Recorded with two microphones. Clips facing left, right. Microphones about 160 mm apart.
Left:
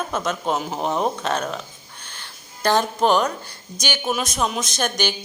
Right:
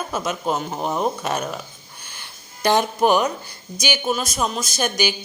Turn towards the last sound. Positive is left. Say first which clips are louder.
# right 1 dB
turn(degrees=-10)  # may be behind; listen again after turning